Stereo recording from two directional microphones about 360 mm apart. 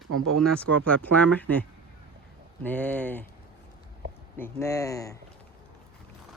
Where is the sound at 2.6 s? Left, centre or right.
Centre.